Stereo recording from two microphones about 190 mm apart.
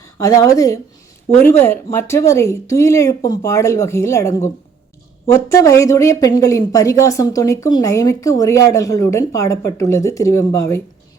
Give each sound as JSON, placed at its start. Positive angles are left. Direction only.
{"t": 0.0, "sound": "speech", "side_deg": 15}